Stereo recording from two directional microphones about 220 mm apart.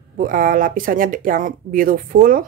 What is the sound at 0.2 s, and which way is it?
Speech, 40° right (ahead or behind).